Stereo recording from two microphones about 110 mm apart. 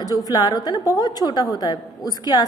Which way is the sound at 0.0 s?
35° left (ahead or behind).